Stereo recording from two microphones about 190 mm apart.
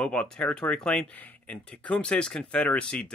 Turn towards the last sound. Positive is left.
turn(degrees=5)  # may be behind; listen again after turning